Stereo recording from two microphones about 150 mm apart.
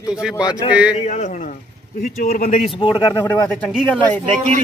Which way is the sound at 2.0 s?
70° left (ahead or behind).